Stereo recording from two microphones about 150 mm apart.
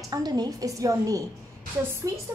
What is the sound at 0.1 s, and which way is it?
A woman's voice, 25° right (ahead or behind).